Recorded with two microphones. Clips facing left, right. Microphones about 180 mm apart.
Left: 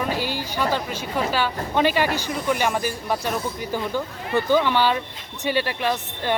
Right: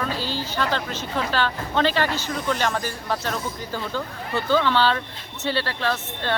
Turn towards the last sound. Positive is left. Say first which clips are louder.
# left 1 dB
turn(degrees=15)  # may be behind; listen again after turning